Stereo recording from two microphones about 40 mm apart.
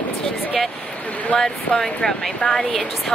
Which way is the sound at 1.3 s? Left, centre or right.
Centre.